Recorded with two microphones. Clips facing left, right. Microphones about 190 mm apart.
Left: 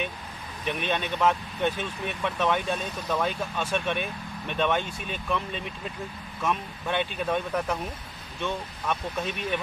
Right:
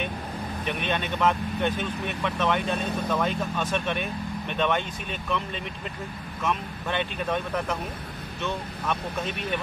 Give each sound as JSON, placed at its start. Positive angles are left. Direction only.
{"t": 0.7, "sound": "speech", "side_deg": 0}